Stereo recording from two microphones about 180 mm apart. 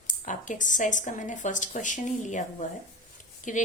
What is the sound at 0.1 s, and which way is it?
A woman's voice, 45° left (ahead or behind).